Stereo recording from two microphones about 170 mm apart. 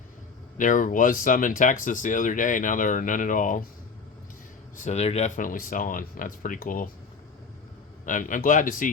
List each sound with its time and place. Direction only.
0.6 s speech: 50° left (ahead or behind)
4.8 s speech: 40° left (ahead or behind)
8.0 s speech: 50° left (ahead or behind)